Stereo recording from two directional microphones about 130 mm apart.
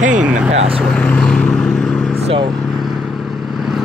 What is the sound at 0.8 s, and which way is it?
Vehicle, 5° left (ahead or behind).